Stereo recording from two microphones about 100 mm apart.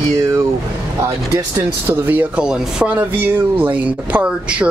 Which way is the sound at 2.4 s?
10° right (ahead or behind).